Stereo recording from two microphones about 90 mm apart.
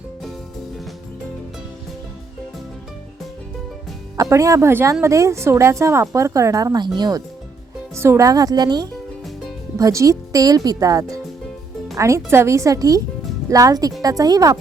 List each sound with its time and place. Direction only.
4.2 s a woman's voice: 35° right (ahead or behind)
6.7 s speech: 55° right (ahead or behind)
7.9 s speech: 30° right (ahead or behind); by 8.9 s 50° right (ahead or behind)
9.7 s a woman's voice: 35° right (ahead or behind)